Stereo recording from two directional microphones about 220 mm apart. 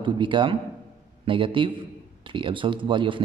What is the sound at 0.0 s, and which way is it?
A man's voice, 20° right (ahead or behind).